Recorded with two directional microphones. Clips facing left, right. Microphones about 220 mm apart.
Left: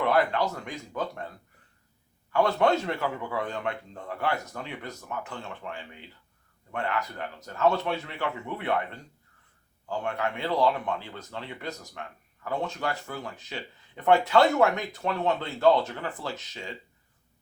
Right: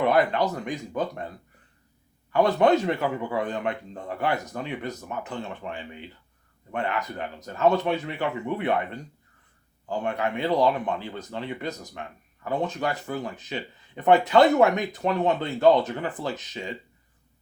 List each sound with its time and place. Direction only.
0.0 s speech: 20° right (ahead or behind)
2.3 s speech: 20° right (ahead or behind)